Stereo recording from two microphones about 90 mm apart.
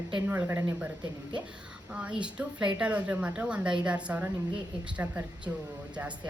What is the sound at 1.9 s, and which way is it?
Speech, 10° right (ahead or behind).